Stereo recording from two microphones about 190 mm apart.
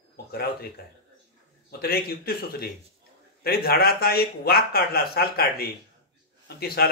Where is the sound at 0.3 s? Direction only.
55° left (ahead or behind).